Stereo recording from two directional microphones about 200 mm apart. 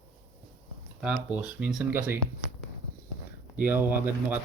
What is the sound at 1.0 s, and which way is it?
Speech, 5° right (ahead or behind).